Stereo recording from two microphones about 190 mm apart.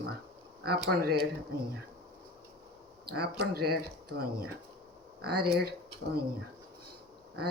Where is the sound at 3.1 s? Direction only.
55° right (ahead or behind).